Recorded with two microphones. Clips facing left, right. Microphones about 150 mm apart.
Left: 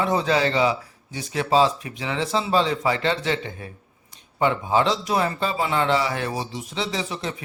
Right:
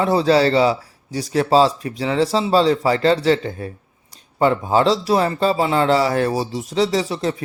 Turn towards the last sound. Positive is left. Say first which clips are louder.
# right 8 dB
turn(degrees=-35)  # may be behind; listen again after turning